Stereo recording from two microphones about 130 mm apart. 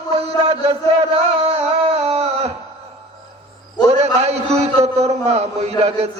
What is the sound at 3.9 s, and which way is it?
A man's voice, 50° right (ahead or behind).